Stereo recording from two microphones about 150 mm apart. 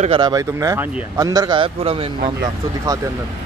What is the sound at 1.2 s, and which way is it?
Speech, 25° right (ahead or behind).